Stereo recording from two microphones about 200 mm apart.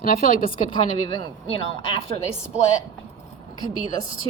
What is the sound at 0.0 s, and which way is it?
Speech, 45° left (ahead or behind).